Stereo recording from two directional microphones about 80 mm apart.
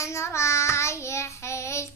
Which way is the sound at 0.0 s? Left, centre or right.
Left.